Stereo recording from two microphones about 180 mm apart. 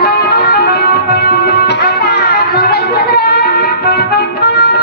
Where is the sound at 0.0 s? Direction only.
65° left (ahead or behind).